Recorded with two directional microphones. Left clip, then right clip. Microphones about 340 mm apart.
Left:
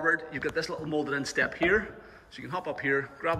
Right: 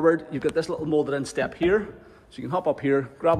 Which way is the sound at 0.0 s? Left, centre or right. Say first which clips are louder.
Right 6 dB; centre.